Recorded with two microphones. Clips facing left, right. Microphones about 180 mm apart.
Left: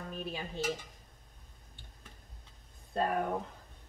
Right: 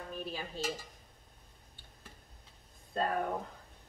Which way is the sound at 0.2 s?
20° left (ahead or behind).